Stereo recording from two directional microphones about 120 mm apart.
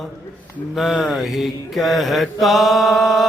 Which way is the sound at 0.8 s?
Centre (ahead or behind).